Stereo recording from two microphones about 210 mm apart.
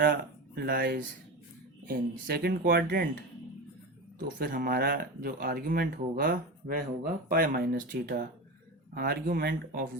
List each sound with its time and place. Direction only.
0.0 s speech: 45° right (ahead or behind)
4.2 s speech: 45° right (ahead or behind)